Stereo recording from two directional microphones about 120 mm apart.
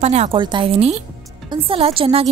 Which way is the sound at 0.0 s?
65° right (ahead or behind).